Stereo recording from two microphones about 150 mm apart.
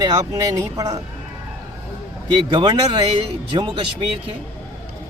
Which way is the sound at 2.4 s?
30° right (ahead or behind).